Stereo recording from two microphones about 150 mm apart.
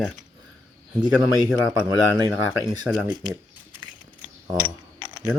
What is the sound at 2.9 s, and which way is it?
Speech, 10° right (ahead or behind).